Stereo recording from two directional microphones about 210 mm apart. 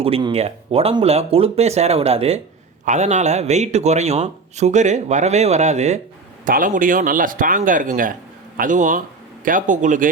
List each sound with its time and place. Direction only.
0.0 s a man's voice: 25° right (ahead or behind)